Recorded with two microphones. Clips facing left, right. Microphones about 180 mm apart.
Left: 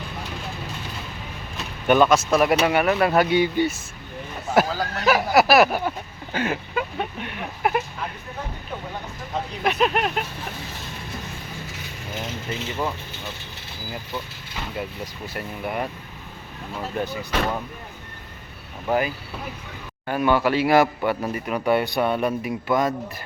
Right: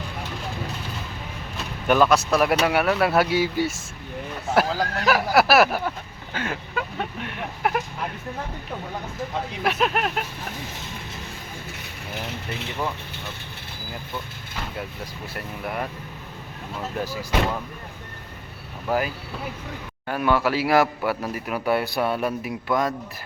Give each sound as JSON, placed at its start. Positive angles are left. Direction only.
{"t": 1.9, "sound": "a man's voice", "side_deg": 0}
{"t": 9.6, "sound": "a man's voice", "side_deg": 0}
{"t": 12.5, "sound": "speech", "side_deg": -60}
{"t": 15.3, "sound": "a man's voice", "side_deg": 0}
{"t": 18.9, "sound": "a man's voice", "side_deg": 0}